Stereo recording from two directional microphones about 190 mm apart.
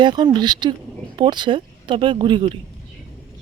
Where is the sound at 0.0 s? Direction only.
25° right (ahead or behind).